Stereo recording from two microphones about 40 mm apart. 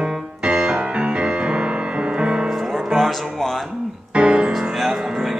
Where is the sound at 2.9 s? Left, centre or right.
Centre.